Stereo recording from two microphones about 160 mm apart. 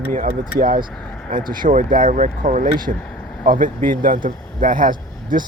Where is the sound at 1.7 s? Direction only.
55° right (ahead or behind).